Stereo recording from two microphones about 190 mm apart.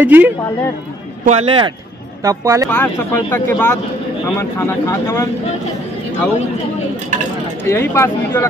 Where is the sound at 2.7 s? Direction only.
10° left (ahead or behind).